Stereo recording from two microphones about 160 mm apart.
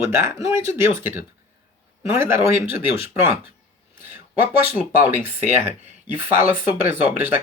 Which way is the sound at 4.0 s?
10° right (ahead or behind).